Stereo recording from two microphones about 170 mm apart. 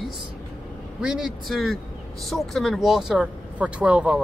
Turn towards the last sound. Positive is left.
turn(degrees=-10)  # may be behind; listen again after turning